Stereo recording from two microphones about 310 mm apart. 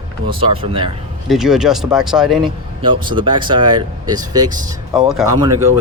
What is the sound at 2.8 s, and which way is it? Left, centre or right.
Speech, centre.